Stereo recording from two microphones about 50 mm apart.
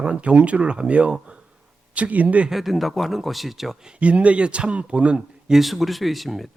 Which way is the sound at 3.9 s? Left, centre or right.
Right.